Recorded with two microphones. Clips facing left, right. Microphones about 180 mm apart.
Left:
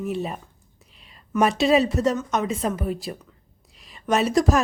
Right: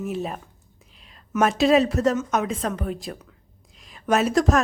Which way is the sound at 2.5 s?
10° left (ahead or behind).